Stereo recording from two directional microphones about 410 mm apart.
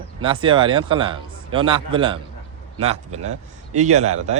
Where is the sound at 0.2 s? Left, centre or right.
Centre.